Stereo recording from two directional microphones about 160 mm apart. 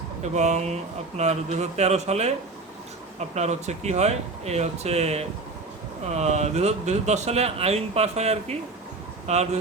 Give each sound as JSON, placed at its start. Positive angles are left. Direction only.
{"t": 0.2, "sound": "speech", "side_deg": -45}